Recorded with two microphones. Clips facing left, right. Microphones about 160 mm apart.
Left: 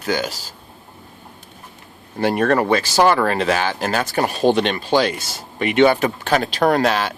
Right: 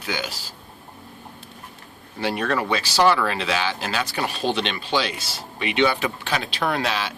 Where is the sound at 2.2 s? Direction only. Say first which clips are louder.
Left 7 dB; 50° left (ahead or behind).